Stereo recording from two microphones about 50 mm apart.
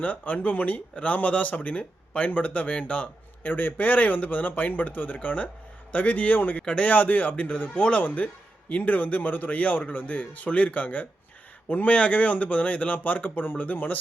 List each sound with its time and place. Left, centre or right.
0.0 s speech: left
3.4 s speech: left